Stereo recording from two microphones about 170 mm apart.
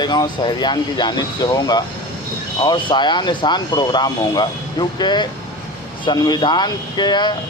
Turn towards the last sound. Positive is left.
turn(degrees=25)  # may be behind; listen again after turning